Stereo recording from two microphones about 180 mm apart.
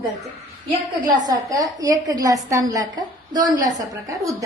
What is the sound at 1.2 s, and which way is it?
A woman's voice, 20° right (ahead or behind).